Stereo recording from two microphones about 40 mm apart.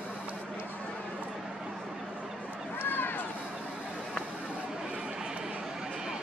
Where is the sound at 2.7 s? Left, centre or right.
Left.